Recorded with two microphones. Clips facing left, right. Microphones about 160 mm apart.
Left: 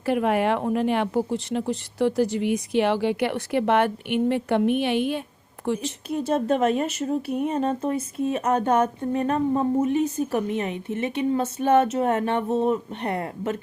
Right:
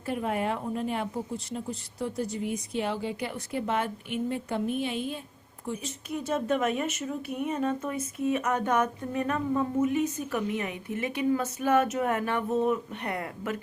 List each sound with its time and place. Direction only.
0.0 s speech: 80° left
5.6 s speech: 90° left
6.1 s speech: 30° left (ahead or behind)